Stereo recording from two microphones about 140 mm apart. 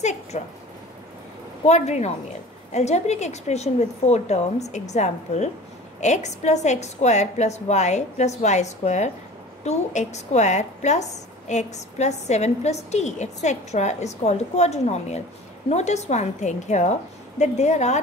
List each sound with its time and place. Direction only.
0.0 s a woman's voice: 55° left (ahead or behind)
1.7 s a woman's voice: 55° left (ahead or behind)